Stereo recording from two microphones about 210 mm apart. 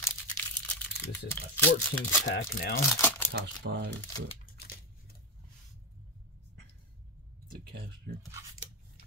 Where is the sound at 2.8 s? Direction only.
10° left (ahead or behind).